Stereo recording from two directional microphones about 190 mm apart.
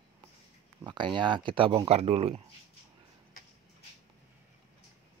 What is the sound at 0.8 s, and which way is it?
Speech, 25° right (ahead or behind).